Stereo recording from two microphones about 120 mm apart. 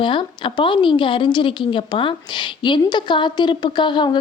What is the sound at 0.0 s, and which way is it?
A woman's voice, 45° left (ahead or behind).